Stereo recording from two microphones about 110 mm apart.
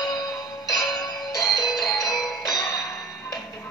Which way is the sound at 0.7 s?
40° left (ahead or behind).